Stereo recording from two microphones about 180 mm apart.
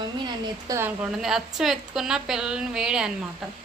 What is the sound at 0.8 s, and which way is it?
A woman's voice, 10° right (ahead or behind).